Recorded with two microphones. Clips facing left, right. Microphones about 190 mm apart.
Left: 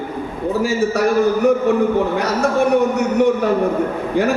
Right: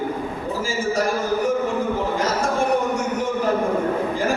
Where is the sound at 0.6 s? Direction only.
65° left (ahead or behind).